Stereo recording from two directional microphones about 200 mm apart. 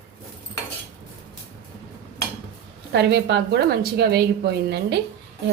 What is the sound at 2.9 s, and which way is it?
A woman's voice, 55° right (ahead or behind).